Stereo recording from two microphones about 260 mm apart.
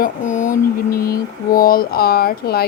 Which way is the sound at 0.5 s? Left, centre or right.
Centre.